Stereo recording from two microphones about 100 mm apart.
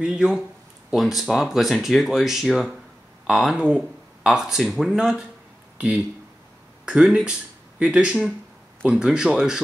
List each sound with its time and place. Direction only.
0.0 s speech: 10° right (ahead or behind)